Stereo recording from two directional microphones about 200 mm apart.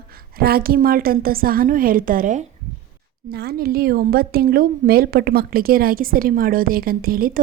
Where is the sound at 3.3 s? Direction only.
55° right (ahead or behind).